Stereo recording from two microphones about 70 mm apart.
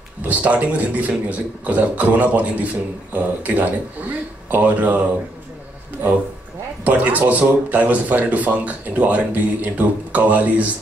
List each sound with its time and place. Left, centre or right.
0.2 s speech: right
6.8 s speech: right